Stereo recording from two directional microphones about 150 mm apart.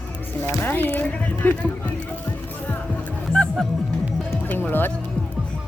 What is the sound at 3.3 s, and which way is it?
Music, 5° left (ahead or behind).